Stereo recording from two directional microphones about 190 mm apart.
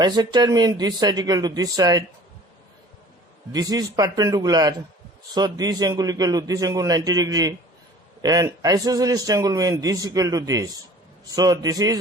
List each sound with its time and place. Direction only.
0.0 s a man's voice: 25° right (ahead or behind)
3.5 s a man's voice: 20° right (ahead or behind)